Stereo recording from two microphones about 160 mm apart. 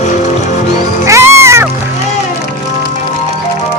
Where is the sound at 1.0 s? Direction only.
15° right (ahead or behind).